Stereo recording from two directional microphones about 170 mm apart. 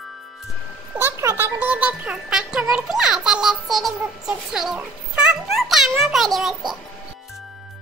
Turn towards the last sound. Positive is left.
turn(degrees=0)  # may be behind; listen again after turning